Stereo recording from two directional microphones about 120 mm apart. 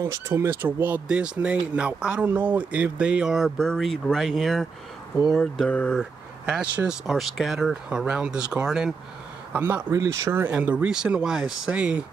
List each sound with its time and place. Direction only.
0.3 s speech: 20° right (ahead or behind); by 4.6 s centre (ahead or behind)
5.3 s mantra: 5° left (ahead or behind)
6.5 s speech: 5° right (ahead or behind)
9.5 s speech: 15° right (ahead or behind)